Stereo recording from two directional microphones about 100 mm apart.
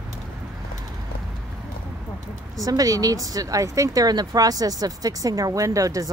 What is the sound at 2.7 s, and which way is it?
Speech, 35° right (ahead or behind).